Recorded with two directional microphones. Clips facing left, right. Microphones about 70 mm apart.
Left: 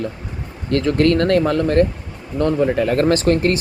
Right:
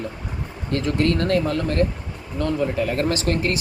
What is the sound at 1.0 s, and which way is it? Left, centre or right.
Speech, left.